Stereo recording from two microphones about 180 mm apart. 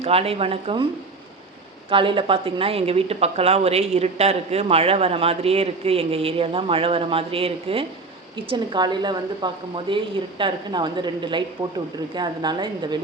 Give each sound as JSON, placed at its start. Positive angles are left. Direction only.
{"t": 0.0, "sound": "a woman's voice", "side_deg": -35}
{"t": 1.9, "sound": "a woman's voice", "side_deg": -30}